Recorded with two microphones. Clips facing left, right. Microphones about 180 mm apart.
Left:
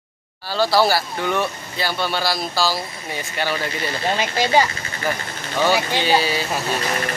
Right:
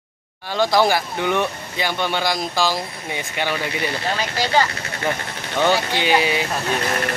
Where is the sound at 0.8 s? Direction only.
20° right (ahead or behind).